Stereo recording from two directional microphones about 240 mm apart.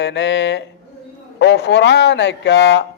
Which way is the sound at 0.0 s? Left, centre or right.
Left.